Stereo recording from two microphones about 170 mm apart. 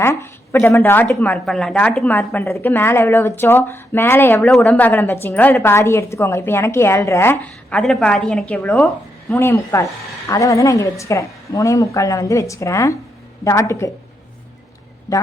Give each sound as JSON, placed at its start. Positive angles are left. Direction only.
{"t": 0.0, "sound": "a woman's voice", "side_deg": 15}
{"t": 15.1, "sound": "a woman's voice", "side_deg": 20}